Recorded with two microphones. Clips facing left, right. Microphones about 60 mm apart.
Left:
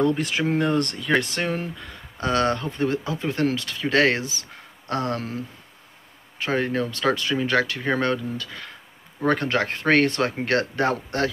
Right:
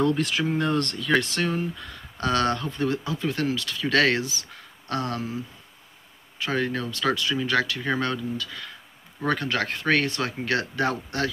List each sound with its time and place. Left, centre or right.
0.0 s speech: left
6.4 s speech: left